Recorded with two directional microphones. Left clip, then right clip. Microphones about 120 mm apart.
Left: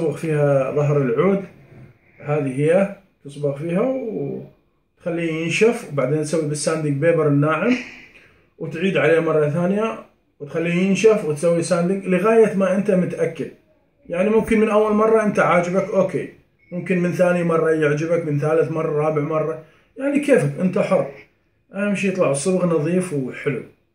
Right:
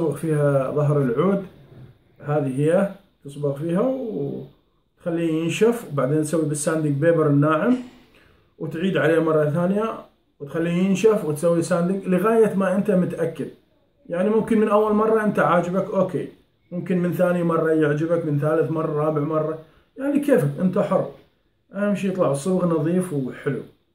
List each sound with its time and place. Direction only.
0.1 s a man's voice: 10° right (ahead or behind)
5.0 s a man's voice: 15° right (ahead or behind)
7.6 s speech: 5° right (ahead or behind)
8.7 s a man's voice: 20° right (ahead or behind)